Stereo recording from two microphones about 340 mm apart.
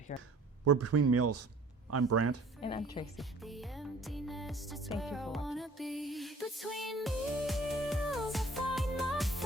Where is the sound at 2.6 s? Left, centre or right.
Centre.